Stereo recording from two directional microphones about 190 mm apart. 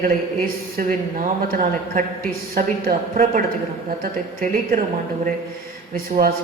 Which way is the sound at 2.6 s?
50° right (ahead or behind).